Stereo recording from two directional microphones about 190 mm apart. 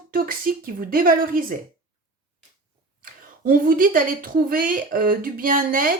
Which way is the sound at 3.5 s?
50° right (ahead or behind).